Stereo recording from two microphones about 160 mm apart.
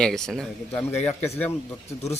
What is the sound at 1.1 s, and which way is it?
Speech, 15° left (ahead or behind).